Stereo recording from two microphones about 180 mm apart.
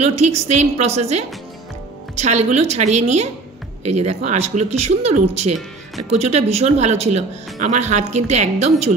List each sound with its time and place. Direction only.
0.0 s speech: 35° right (ahead or behind)